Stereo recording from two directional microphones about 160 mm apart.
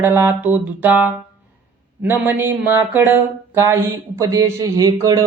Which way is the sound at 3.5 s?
15° right (ahead or behind).